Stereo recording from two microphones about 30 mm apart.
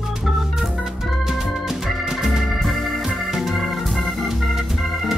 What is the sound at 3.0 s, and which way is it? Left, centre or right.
Organ, centre.